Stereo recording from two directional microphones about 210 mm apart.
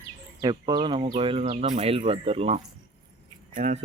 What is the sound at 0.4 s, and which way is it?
Speech, 20° right (ahead or behind).